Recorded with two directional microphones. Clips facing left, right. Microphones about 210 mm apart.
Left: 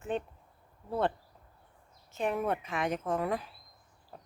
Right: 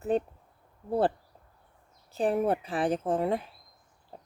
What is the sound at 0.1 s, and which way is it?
Speech, 40° right (ahead or behind).